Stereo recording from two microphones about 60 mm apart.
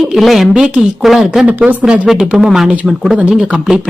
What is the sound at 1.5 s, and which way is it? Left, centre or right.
Speech, right.